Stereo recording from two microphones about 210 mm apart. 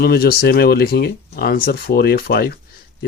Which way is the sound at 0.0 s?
50° left (ahead or behind).